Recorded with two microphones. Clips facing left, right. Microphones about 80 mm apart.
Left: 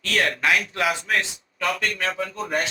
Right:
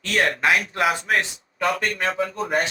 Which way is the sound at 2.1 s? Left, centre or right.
Centre.